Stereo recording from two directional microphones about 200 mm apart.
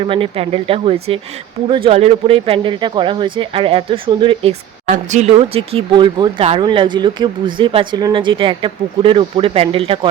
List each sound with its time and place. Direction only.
0.0 s speech: 25° right (ahead or behind)